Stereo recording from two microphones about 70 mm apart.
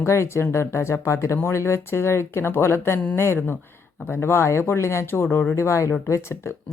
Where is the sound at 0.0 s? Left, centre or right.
Left.